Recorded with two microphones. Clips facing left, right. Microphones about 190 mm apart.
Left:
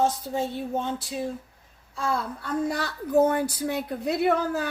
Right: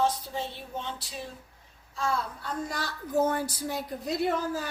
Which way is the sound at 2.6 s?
60° left (ahead or behind).